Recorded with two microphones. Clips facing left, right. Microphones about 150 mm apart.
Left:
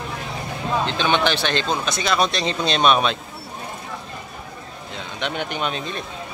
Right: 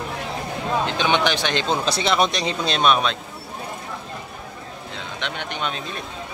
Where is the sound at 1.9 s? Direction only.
25° right (ahead or behind).